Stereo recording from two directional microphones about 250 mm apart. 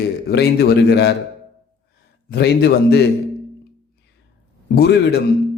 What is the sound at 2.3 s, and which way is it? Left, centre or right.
Speech, left.